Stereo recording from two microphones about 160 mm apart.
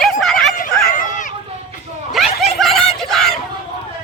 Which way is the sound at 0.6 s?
55° left (ahead or behind).